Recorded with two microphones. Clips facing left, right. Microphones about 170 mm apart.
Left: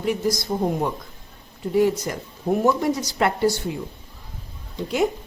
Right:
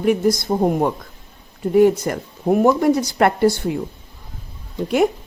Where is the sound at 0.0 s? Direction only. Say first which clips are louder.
Right 6 dB; 55° right (ahead or behind).